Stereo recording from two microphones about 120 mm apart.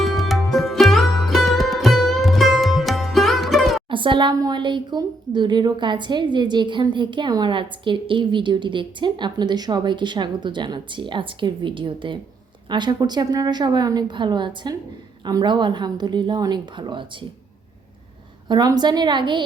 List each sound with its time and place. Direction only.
0.0 s sitar: centre (ahead or behind)
3.8 s a woman's voice: 45° right (ahead or behind)
18.4 s a woman's voice: 35° right (ahead or behind)